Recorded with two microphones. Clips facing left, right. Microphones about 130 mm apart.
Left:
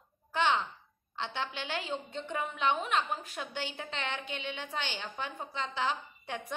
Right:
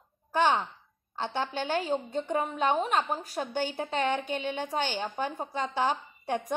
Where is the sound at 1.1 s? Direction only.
40° right (ahead or behind).